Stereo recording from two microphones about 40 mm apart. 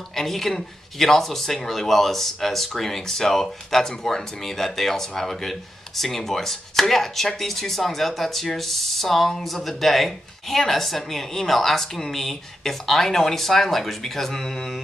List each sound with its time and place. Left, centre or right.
0.1 s speech: centre